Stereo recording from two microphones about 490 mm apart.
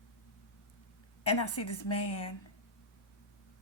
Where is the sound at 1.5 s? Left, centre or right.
Left.